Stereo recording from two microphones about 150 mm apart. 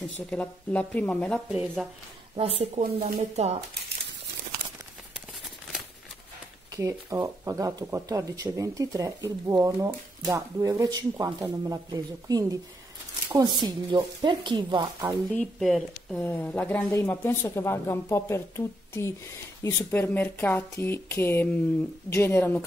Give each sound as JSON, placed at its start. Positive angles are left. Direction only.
{"t": 0.3, "sound": "speech", "side_deg": 10}
{"t": 1.5, "sound": "speech", "side_deg": -5}
{"t": 2.3, "sound": "a woman's voice", "side_deg": -40}
{"t": 2.8, "sound": "speech", "side_deg": -75}
{"t": 3.2, "sound": "speech", "side_deg": -45}
{"t": 6.7, "sound": "speech", "side_deg": -20}
{"t": 15.3, "sound": "speech", "side_deg": 5}
{"t": 16.2, "sound": "speech", "side_deg": 15}